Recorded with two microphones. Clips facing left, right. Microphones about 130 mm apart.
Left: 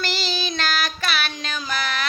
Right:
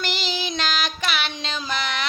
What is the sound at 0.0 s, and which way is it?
Child singing, 20° right (ahead or behind).